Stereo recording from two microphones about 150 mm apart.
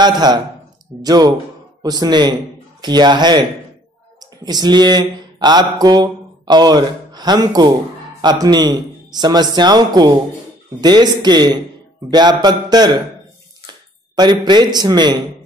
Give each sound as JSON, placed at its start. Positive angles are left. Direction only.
{"t": 0.0, "sound": "a man's voice", "side_deg": -30}
{"t": 14.1, "sound": "a man's voice", "side_deg": -30}